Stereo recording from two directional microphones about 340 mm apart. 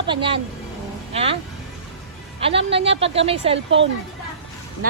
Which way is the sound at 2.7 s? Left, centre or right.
Centre.